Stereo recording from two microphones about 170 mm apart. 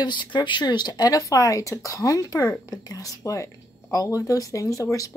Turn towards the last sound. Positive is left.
turn(degrees=20)  # may be behind; listen again after turning